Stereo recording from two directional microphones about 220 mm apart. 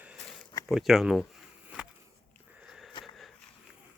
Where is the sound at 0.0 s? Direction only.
Centre (ahead or behind).